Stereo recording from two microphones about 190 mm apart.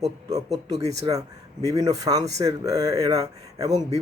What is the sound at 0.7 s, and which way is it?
Speech, 35° right (ahead or behind).